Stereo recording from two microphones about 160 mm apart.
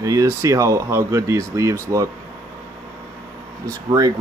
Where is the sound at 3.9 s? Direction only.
25° right (ahead or behind).